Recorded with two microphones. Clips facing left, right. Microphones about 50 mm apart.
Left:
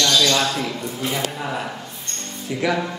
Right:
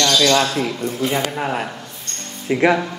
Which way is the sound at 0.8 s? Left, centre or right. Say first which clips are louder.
Right 4 dB; right.